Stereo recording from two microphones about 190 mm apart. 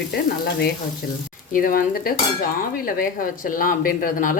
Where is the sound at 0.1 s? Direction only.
55° left (ahead or behind).